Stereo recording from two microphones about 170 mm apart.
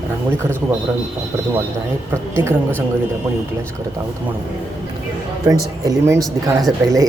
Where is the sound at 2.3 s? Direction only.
15° right (ahead or behind).